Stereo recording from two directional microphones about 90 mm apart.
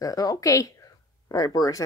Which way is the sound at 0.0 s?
40° left (ahead or behind).